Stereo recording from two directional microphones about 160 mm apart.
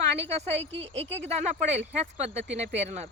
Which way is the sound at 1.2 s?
45° right (ahead or behind).